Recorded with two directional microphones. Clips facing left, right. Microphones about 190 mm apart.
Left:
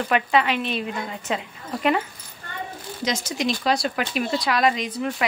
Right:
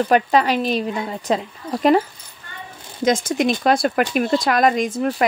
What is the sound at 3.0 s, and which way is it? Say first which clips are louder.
Speech: right 8 dB; 50° right (ahead or behind).